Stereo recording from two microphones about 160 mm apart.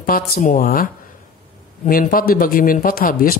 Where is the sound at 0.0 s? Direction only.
60° left (ahead or behind).